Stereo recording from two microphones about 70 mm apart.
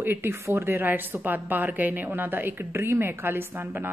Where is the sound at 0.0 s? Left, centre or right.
Right.